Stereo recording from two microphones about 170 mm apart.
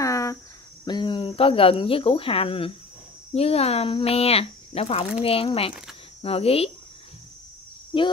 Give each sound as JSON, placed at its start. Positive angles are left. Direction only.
{"t": 0.0, "sound": "cricket", "side_deg": 20}
{"t": 0.8, "sound": "speech", "side_deg": 25}
{"t": 7.9, "sound": "speech", "side_deg": 30}